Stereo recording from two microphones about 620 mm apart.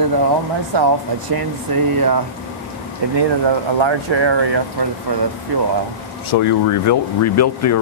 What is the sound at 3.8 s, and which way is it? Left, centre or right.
Speech, right.